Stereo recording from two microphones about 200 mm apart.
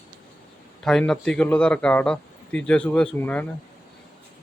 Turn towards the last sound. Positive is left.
turn(degrees=5)  # may be behind; listen again after turning